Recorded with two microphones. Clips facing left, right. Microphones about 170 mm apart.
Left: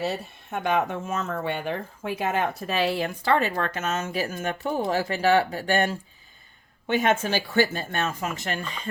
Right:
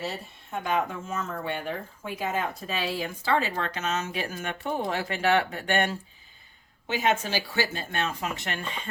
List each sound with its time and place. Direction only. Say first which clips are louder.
0.5 s speech: left 3 dB; 70° left (ahead or behind); by 6.0 s 35° left (ahead or behind)
6.8 s speech: left 3 dB; 55° left (ahead or behind); by 8.6 s 40° left (ahead or behind)